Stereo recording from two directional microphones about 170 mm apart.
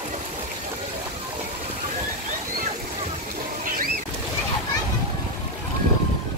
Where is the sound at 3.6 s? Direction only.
55° right (ahead or behind).